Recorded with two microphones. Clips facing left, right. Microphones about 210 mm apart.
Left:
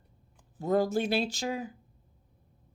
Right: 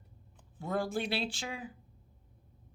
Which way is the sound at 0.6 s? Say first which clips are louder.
Left 7 dB; 40° left (ahead or behind).